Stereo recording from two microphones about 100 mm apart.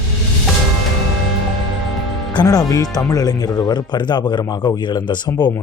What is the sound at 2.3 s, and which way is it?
Speech, 40° left (ahead or behind).